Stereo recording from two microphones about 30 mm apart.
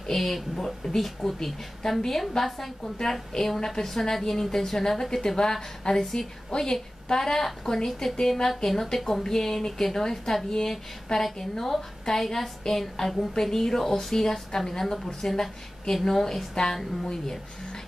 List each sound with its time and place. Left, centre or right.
0.0 s a woman's voice: centre